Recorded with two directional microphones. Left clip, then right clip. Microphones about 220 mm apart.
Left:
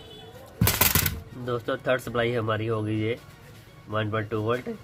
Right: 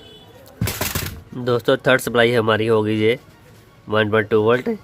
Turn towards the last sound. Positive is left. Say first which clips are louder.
# right 12 dB
turn(degrees=-40)  # may be behind; listen again after turning